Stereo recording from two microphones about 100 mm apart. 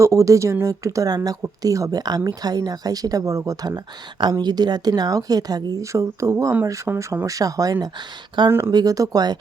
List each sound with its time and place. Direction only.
0.0 s a woman's voice: 30° right (ahead or behind)
4.2 s a woman's voice: 45° right (ahead or behind)
8.4 s speech: 25° right (ahead or behind)
8.7 s a woman's voice: 40° right (ahead or behind)